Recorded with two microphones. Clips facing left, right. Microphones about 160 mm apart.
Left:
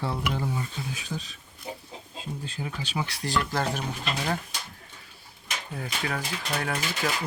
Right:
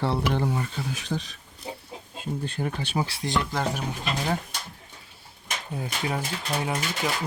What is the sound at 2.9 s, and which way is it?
Speech, 30° right (ahead or behind).